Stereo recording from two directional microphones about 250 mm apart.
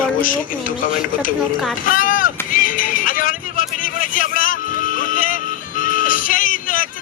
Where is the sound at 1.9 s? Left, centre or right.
Left.